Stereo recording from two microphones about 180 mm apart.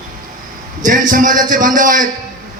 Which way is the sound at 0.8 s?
50° right (ahead or behind).